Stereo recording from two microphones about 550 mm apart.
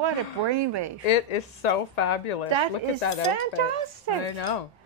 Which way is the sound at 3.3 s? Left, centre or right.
Right.